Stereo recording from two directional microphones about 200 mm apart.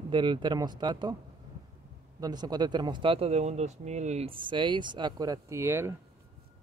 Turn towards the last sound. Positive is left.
turn(degrees=-10)  # may be behind; listen again after turning